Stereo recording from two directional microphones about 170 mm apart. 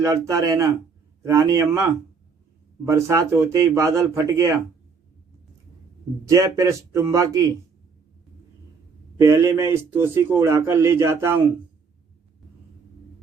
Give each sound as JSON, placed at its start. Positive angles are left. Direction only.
{"t": 0.0, "sound": "speech", "side_deg": -20}
{"t": 6.2, "sound": "speech", "side_deg": -20}
{"t": 9.1, "sound": "speech", "side_deg": -15}